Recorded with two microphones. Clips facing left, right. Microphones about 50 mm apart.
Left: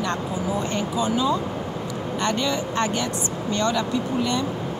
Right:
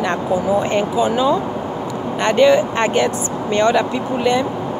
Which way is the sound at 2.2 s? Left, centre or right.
Right.